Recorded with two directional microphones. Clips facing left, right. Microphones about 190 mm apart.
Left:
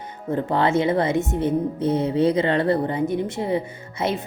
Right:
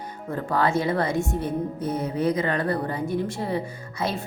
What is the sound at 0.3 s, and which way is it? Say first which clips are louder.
A woman's voice: left 3 dB; 20° left (ahead or behind).